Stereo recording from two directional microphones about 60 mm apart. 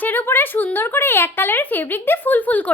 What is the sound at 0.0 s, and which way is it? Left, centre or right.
Speech, left.